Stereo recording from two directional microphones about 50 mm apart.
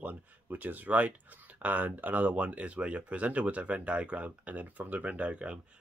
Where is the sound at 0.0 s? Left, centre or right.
Right.